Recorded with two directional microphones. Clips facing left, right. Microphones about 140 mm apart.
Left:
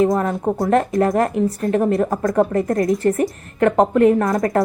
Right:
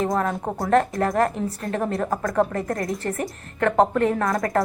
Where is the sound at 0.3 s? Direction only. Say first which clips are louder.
Left 6 dB; centre (ahead or behind).